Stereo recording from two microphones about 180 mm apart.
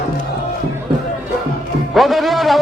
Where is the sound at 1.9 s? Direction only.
Centre (ahead or behind).